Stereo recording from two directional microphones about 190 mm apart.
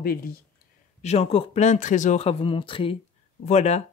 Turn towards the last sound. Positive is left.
turn(degrees=35)  # may be behind; listen again after turning